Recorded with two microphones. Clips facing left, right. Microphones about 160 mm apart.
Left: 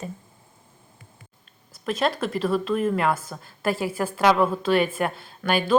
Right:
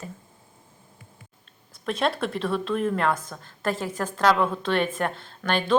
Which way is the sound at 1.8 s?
Centre (ahead or behind).